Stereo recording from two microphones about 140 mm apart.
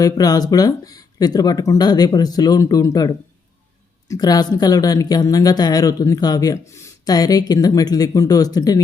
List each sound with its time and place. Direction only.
0.0 s speech: 25° left (ahead or behind)